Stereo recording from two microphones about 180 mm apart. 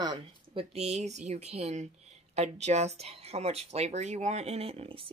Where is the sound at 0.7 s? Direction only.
35° right (ahead or behind).